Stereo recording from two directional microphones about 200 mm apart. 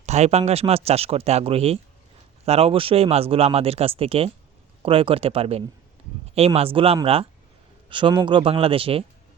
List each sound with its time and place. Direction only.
0.0 s speech: 35° right (ahead or behind)